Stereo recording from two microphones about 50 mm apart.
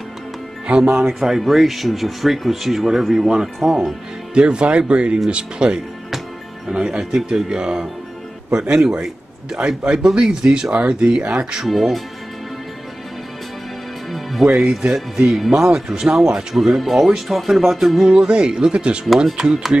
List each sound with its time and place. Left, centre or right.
0.7 s speech: right
1.4 s a man's voice: centre
4.4 s a man's voice: right
11.6 s speech: centre
14.6 s a man's voice: centre
18.1 s speech: centre
19.2 s a man's voice: centre